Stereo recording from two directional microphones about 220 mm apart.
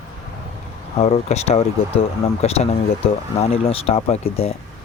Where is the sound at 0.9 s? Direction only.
30° left (ahead or behind).